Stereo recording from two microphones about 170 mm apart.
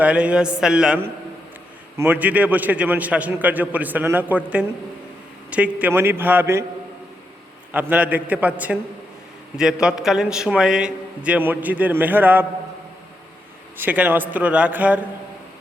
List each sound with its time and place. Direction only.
0.0 s a man's voice: 5° right (ahead or behind)
7.7 s a man's voice: 10° right (ahead or behind)
13.7 s a man's voice: 10° right (ahead or behind)